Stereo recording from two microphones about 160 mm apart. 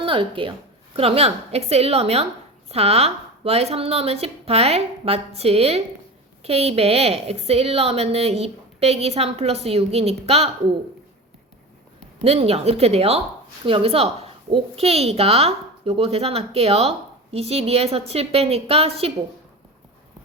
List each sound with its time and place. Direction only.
0.0 s a woman's voice: 35° right (ahead or behind)
12.2 s a woman's voice: 40° right (ahead or behind)